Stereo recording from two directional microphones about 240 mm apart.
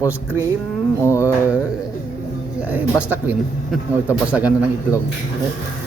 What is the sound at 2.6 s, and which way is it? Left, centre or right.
A man's voice, centre.